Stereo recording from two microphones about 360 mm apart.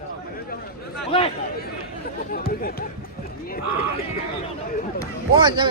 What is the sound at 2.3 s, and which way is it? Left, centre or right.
Speech, left.